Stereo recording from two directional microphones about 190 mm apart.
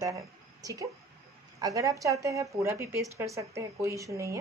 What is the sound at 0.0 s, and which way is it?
Speech, 15° right (ahead or behind).